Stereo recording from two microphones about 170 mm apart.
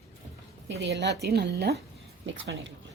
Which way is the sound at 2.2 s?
90° right.